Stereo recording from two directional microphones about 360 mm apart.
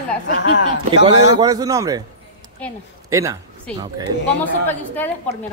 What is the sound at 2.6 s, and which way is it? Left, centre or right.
Speech, centre.